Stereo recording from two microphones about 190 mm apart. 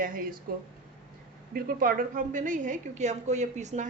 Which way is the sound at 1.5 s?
50° right (ahead or behind).